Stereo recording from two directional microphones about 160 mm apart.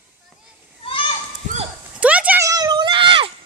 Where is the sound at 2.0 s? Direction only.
10° right (ahead or behind).